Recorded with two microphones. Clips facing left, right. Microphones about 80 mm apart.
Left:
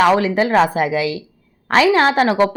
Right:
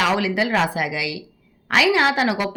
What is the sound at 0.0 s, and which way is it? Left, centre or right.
A woman's voice, left.